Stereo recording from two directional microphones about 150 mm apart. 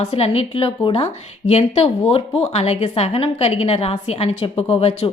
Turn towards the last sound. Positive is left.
turn(degrees=40)  # may be behind; listen again after turning